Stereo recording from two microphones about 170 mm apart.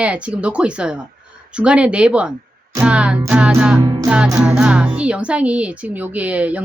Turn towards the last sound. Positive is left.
turn(degrees=-10)  # may be behind; listen again after turning